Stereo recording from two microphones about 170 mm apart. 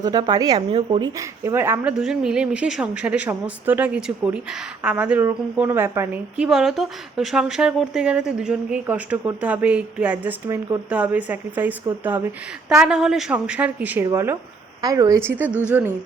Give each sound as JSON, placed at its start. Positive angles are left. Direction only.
{"t": 0.0, "sound": "a woman's voice", "side_deg": -20}